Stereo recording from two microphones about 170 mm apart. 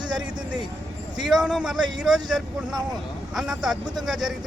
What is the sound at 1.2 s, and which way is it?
Speech, 5° right (ahead or behind).